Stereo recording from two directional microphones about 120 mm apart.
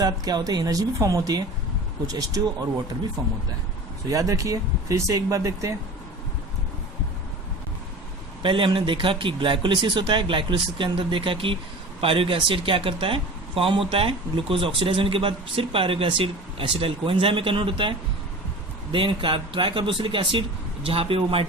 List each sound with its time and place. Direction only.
0.0 s speech: 35° right (ahead or behind)
4.1 s speech: 30° right (ahead or behind)
8.4 s speech: 45° right (ahead or behind)